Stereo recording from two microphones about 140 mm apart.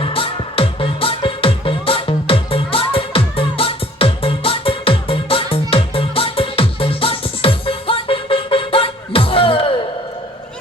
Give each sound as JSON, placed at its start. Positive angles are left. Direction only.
{"t": 0.0, "sound": "music", "side_deg": 40}